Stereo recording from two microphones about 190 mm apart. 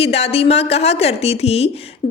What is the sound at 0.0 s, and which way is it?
Speech, 30° left (ahead or behind).